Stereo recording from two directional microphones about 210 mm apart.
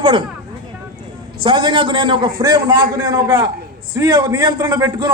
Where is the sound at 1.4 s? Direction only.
25° right (ahead or behind).